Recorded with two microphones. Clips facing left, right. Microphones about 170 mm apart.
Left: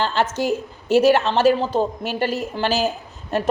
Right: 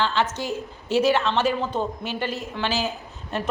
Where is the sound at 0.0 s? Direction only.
45° left (ahead or behind).